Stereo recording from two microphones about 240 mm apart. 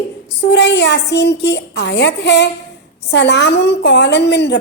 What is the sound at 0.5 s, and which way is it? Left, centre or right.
A woman's voice, left.